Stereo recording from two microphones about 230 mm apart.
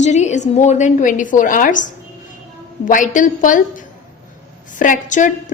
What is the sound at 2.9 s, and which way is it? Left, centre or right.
A woman's voice, left.